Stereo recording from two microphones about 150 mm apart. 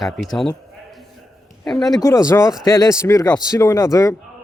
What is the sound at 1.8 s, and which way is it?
A man's voice, 25° left (ahead or behind).